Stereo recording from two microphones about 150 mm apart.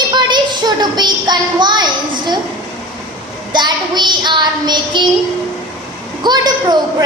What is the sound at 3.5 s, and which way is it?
Child singing, 30° right (ahead or behind).